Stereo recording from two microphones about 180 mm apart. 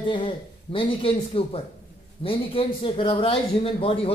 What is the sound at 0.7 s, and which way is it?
A man's voice, 30° left (ahead or behind).